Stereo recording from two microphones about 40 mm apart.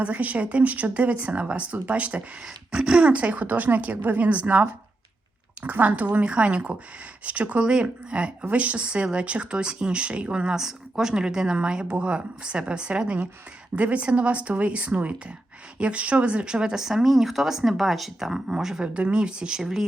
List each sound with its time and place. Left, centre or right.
0.0 s speech: right
2.7 s speech: right
5.8 s speech: right
7.6 s speech: right
10.5 s speech: centre
18.3 s speech: centre